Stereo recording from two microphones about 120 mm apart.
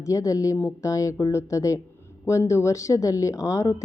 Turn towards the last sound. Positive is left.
turn(degrees=25)  # may be behind; listen again after turning